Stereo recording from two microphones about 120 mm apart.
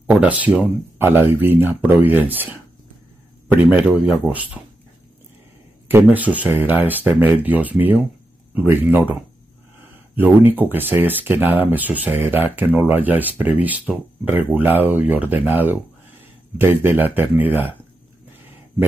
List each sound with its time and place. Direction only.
0.0 s speech: 10° right (ahead or behind)
3.6 s speech: 10° right (ahead or behind)
6.0 s speech: 10° right (ahead or behind)